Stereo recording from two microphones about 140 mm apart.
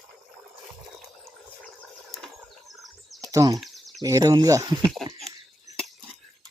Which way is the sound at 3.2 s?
25° right (ahead or behind).